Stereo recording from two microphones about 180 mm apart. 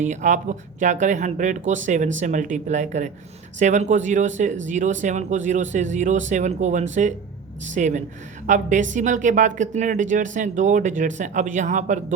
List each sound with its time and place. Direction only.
0.0 s speech: 40° right (ahead or behind)